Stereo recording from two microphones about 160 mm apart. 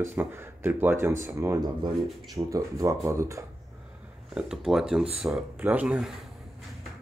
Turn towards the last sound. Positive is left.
turn(degrees=-5)  # may be behind; listen again after turning